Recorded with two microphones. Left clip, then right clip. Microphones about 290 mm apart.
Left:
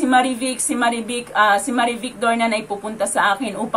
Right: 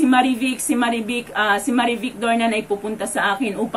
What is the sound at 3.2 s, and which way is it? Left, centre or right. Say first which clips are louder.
Speech: left 1 dB; centre.